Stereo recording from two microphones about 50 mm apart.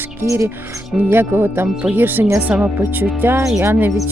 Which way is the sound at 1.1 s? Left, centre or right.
Right.